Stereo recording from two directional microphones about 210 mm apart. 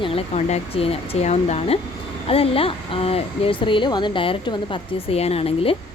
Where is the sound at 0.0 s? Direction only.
30° left (ahead or behind).